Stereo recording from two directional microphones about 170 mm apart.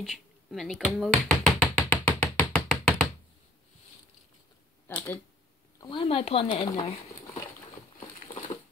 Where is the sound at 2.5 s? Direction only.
Centre (ahead or behind).